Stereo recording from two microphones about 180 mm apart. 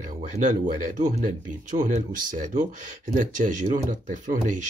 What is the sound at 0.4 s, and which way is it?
Speech, 45° right (ahead or behind).